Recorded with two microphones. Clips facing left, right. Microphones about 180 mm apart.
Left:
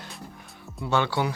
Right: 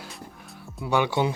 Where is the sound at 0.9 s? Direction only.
15° right (ahead or behind).